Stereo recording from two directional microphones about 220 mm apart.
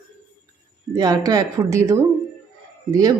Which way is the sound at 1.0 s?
15° right (ahead or behind).